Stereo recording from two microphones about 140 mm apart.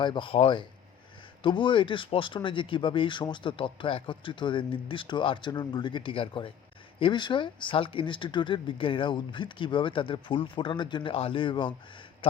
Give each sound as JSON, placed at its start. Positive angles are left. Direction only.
{"t": 0.0, "sound": "speech", "side_deg": 35}